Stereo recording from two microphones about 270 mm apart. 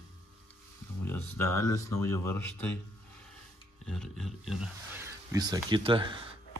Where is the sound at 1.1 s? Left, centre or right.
Centre.